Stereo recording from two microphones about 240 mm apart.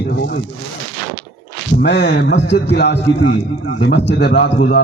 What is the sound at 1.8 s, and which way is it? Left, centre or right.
A man's voice, left.